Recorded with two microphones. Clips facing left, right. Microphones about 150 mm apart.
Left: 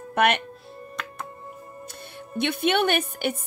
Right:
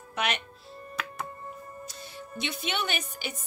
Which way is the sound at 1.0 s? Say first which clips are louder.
Right 1 dB; 5° right (ahead or behind).